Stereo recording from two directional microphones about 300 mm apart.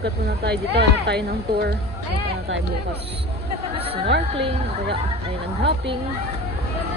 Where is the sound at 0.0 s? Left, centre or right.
Right.